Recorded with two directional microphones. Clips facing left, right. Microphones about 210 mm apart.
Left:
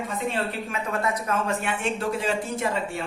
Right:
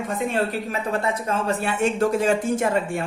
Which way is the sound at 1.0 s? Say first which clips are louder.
Right 2 dB; 30° right (ahead or behind).